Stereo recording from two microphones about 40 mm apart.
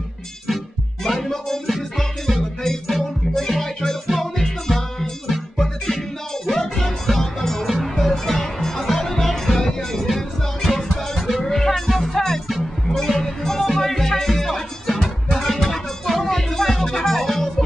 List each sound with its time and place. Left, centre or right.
1.0 s music: centre